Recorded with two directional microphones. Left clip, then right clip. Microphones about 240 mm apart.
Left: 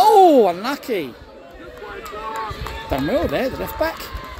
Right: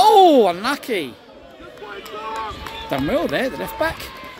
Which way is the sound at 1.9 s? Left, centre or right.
Left.